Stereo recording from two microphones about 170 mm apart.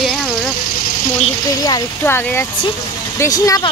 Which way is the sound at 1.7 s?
15° left (ahead or behind).